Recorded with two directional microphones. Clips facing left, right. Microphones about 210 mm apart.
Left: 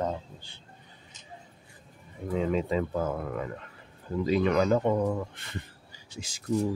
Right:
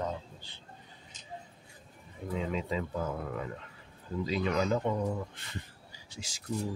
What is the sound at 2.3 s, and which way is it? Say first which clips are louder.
Speech: left 6 dB; 50° left (ahead or behind).